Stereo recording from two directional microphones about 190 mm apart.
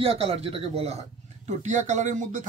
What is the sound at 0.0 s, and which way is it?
Speech, 30° right (ahead or behind).